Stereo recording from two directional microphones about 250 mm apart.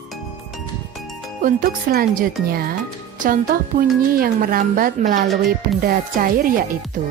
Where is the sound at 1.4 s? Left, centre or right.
Right.